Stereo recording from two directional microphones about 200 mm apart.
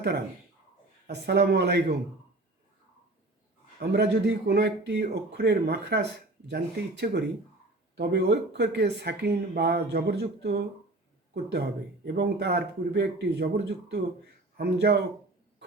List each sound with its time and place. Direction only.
1.0 s a man's voice: 55° right (ahead or behind)
3.8 s a man's voice: 55° right (ahead or behind)
12.0 s a man's voice: 55° right (ahead or behind)